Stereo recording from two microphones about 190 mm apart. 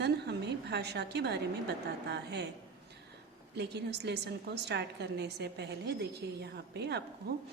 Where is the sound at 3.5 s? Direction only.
60° right (ahead or behind).